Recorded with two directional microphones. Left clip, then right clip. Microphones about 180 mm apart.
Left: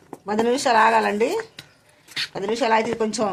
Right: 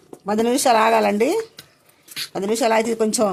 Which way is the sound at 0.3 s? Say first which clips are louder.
Right 3 dB; 85° right.